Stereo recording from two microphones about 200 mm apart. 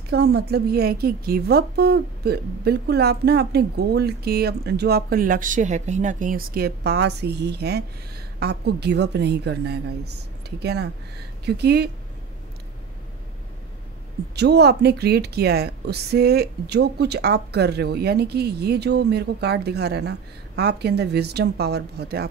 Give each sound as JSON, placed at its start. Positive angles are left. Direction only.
{"t": 0.1, "sound": "a woman's voice", "side_deg": -55}
{"t": 14.3, "sound": "a woman's voice", "side_deg": -55}